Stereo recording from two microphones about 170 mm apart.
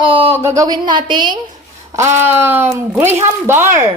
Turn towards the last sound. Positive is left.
turn(degrees=-15)  # may be behind; listen again after turning